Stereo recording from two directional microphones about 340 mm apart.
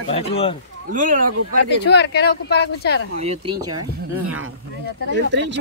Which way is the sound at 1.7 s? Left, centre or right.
Left.